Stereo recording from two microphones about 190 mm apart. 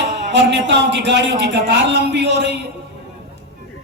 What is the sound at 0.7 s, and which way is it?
Speech, 65° right (ahead or behind).